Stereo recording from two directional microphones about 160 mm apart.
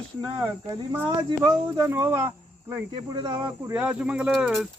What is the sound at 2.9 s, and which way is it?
Speech, 30° right (ahead or behind).